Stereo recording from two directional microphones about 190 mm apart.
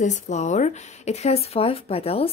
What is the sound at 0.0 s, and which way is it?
Speech, 35° left (ahead or behind).